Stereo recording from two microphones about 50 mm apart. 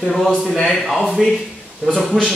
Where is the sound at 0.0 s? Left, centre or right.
Centre.